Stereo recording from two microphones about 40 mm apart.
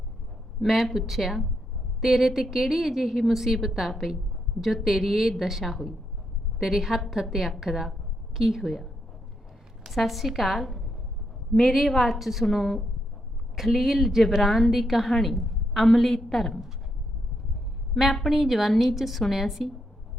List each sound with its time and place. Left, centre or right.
0.6 s a woman's voice: centre
17.9 s a woman's voice: centre